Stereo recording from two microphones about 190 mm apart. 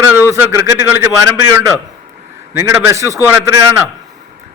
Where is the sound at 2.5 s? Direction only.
15° right (ahead or behind).